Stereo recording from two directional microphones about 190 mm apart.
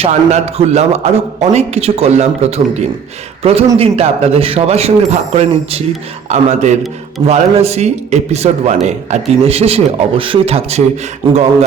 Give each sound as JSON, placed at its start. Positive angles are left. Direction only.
{"t": 0.0, "sound": "a man's voice", "side_deg": -35}